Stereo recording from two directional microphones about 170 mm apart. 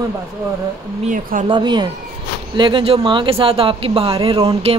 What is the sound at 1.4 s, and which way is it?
Speech, 25° right (ahead or behind).